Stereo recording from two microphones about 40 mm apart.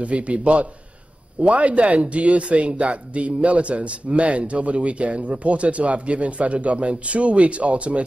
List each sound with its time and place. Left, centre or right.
0.0 s a man's voice: right